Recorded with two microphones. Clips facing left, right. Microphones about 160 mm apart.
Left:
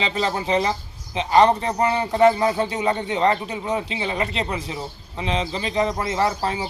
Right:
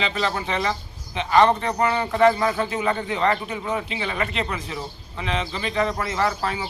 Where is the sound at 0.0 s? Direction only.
30° left (ahead or behind).